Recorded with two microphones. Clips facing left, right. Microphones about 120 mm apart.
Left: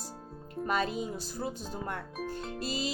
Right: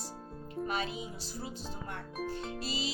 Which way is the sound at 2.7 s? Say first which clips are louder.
Left 5 dB; 45° left (ahead or behind).